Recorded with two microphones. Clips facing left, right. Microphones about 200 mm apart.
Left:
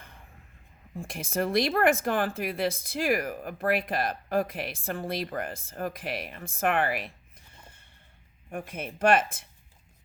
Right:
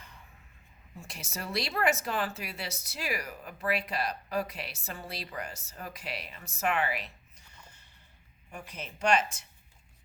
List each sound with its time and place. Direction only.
0.9 s speech: 55° left (ahead or behind)
8.4 s speech: 50° left (ahead or behind)